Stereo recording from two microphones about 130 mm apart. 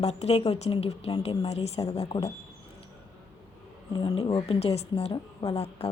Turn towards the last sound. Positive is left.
turn(degrees=50)  # may be behind; listen again after turning